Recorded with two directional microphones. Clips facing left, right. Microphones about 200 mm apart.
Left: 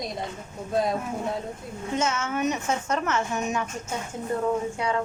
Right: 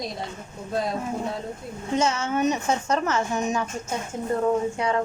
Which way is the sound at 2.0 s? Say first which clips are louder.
Right 3 dB; 35° right (ahead or behind).